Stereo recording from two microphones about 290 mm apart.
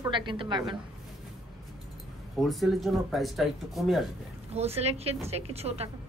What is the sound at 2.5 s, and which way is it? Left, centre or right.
Speech, centre.